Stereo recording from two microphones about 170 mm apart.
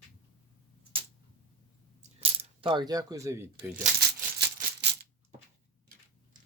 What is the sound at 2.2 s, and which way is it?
Speech, 35° right (ahead or behind).